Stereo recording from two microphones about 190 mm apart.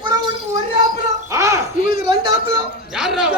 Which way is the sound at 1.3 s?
15° right (ahead or behind).